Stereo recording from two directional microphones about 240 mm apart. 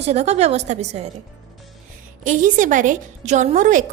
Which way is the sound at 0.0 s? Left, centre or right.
Right.